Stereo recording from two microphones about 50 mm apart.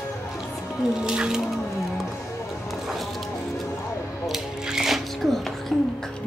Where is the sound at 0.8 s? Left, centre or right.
Centre.